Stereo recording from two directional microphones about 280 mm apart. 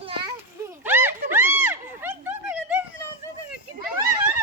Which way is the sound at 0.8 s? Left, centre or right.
Centre.